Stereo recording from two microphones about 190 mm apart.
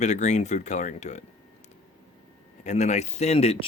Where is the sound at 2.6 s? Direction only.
40° left (ahead or behind).